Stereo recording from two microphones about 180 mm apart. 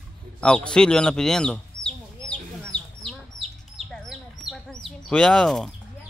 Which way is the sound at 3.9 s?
Centre (ahead or behind).